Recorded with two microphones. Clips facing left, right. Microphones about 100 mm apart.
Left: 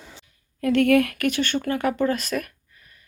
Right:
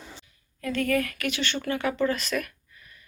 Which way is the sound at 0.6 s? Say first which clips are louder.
Left 8 dB; 65° left (ahead or behind).